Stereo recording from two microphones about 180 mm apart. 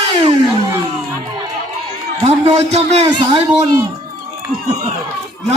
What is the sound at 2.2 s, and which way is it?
A man's voice, 35° right (ahead or behind).